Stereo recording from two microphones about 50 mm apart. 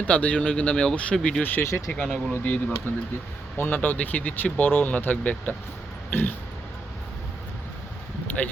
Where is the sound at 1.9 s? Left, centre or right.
Left.